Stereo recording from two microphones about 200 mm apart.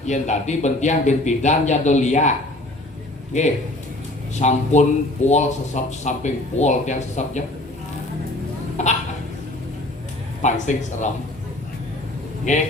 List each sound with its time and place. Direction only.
0.1 s speech: 35° left (ahead or behind)
3.3 s speech: 35° left (ahead or behind)
8.8 s a sound: 35° left (ahead or behind)
10.4 s speech: 40° left (ahead or behind)